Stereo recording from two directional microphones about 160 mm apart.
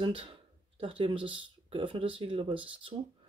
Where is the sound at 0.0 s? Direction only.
30° right (ahead or behind).